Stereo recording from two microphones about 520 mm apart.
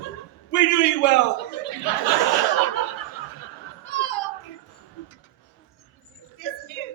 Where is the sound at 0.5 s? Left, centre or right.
Left.